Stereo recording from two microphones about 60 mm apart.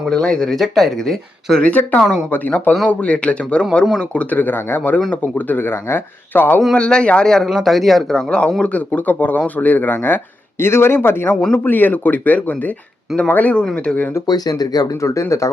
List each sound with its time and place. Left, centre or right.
0.1 s speech: centre
1.6 s speech: left; by 3.8 s centre
4.1 s speech: left
6.7 s speech: centre
8.3 s speech: centre; by 10.2 s left
10.6 s speech: left
14.3 s speech: left